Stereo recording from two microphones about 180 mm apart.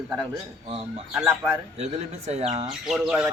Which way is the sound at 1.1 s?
5° right (ahead or behind).